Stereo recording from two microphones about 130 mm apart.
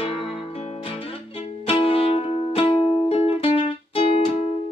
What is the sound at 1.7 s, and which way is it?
Music, 45° left (ahead or behind).